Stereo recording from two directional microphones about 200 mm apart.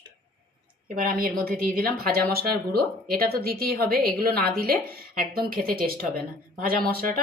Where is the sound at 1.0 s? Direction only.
45° right (ahead or behind).